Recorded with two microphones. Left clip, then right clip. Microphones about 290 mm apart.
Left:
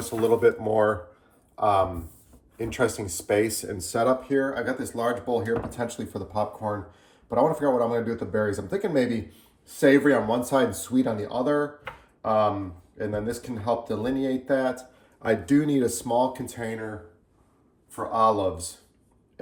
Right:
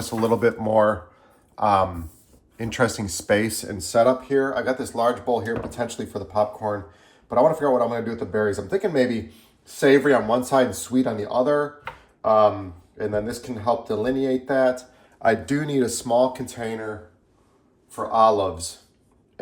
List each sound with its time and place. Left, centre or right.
0.2 s speech: right
3.2 s speech: right
4.0 s speech: centre
17.9 s speech: centre